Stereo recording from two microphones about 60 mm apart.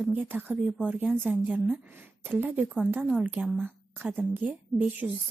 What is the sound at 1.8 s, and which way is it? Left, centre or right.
Speech, right.